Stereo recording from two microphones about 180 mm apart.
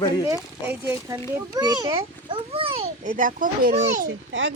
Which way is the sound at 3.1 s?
50° right (ahead or behind).